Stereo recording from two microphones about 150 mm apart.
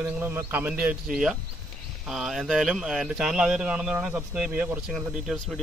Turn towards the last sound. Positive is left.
turn(degrees=5)  # may be behind; listen again after turning